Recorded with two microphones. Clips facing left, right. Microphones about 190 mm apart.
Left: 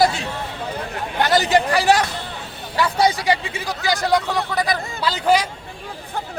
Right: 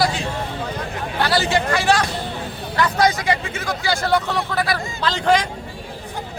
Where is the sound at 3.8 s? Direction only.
15° left (ahead or behind).